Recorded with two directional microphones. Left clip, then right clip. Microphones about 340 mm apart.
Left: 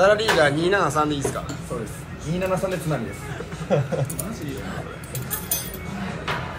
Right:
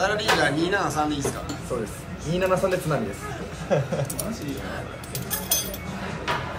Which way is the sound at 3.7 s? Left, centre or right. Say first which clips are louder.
Left 1 dB; left.